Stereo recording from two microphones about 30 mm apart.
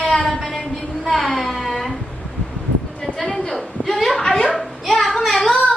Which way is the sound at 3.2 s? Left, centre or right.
Left.